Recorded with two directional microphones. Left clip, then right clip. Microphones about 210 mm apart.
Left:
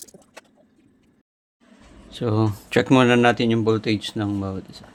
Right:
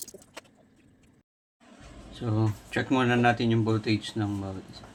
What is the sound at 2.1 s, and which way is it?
Speech, 55° left (ahead or behind).